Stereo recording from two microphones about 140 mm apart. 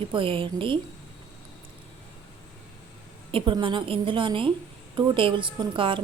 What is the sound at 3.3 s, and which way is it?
A woman's voice, 35° right (ahead or behind).